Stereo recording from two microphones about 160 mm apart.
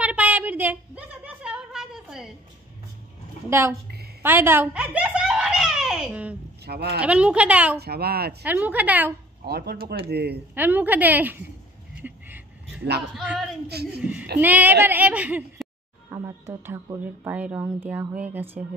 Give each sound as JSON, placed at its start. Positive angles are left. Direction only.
{"t": 0.0, "sound": "a sound", "side_deg": -10}
{"t": 3.4, "sound": "speech", "side_deg": -15}
{"t": 4.2, "sound": "giggle", "side_deg": -15}
{"t": 6.6, "sound": "speech", "side_deg": -85}
{"t": 7.0, "sound": "speech", "side_deg": -5}
{"t": 7.8, "sound": "speech", "side_deg": -75}
{"t": 8.5, "sound": "speech", "side_deg": -10}
{"t": 9.4, "sound": "speech", "side_deg": -80}
{"t": 10.5, "sound": "speech", "side_deg": -10}
{"t": 12.0, "sound": "a sound", "side_deg": -10}
{"t": 13.1, "sound": "speech", "side_deg": -5}
{"t": 13.7, "sound": "speech", "side_deg": -90}
{"t": 14.4, "sound": "speech", "side_deg": -10}